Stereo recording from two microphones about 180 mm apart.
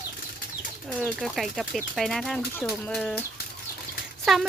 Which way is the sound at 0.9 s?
5° right (ahead or behind).